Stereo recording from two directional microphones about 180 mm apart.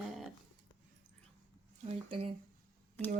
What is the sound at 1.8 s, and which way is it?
Speech, 30° right (ahead or behind).